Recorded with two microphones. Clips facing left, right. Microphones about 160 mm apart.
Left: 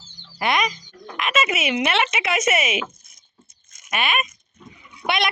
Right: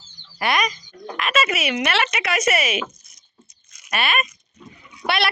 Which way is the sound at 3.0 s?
50° left (ahead or behind).